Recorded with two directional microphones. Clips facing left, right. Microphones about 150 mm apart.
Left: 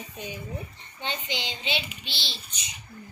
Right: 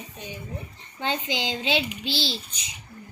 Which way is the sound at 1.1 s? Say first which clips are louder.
Right 6 dB; 90° right.